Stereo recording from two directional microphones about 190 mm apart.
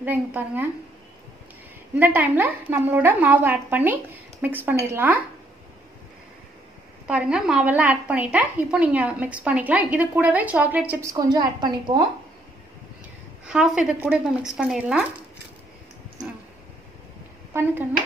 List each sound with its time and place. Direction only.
0.0 s a woman's voice: 10° right (ahead or behind)
2.0 s a woman's voice: 10° right (ahead or behind)
7.1 s a woman's voice: 5° right (ahead or behind)
11.1 s a woman's voice: 20° right (ahead or behind)
13.5 s speech: 5° right (ahead or behind)
17.5 s speech: 15° right (ahead or behind)